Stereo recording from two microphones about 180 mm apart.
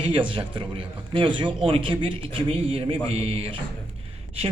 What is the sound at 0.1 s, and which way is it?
A man's voice, 25° right (ahead or behind).